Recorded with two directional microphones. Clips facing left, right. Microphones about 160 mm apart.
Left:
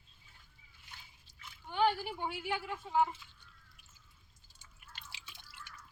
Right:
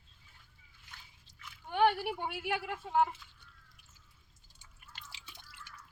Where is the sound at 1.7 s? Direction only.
60° right (ahead or behind).